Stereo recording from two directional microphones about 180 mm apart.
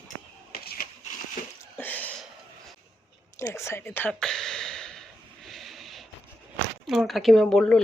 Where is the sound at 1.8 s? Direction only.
10° left (ahead or behind).